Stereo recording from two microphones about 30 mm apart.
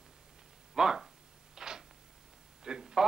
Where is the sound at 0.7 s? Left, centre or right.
Centre.